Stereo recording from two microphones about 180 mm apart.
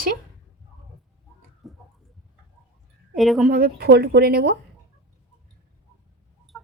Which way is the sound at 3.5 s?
55° right (ahead or behind).